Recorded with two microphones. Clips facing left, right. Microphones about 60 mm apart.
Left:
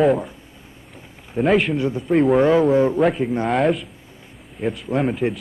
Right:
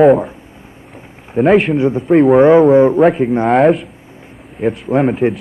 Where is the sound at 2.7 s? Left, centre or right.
Right.